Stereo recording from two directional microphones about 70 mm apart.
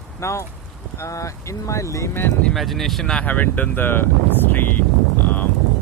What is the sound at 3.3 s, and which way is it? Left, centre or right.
Speech, left.